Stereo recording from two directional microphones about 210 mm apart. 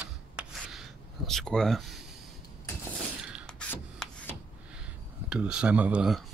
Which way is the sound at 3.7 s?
10° left (ahead or behind).